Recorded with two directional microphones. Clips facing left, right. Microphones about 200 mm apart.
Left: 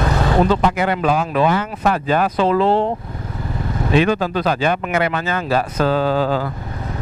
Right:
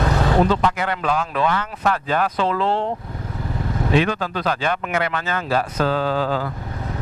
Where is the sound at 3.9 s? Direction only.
10° left (ahead or behind).